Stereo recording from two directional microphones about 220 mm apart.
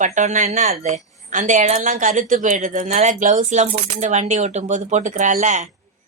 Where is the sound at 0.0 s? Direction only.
35° right (ahead or behind).